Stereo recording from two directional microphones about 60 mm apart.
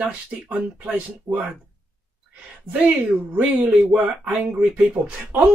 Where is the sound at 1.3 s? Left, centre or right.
Right.